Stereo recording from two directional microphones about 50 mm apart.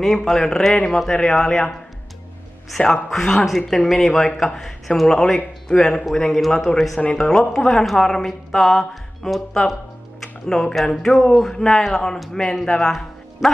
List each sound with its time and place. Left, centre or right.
0.0 s a man's voice: centre
2.8 s a man's voice: centre
7.7 s a man's voice: centre